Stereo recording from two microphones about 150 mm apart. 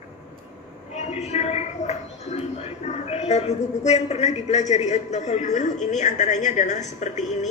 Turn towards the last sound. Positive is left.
turn(degrees=50)  # may be behind; listen again after turning